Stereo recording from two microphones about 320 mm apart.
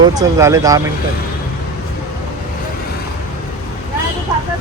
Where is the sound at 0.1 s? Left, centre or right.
Centre.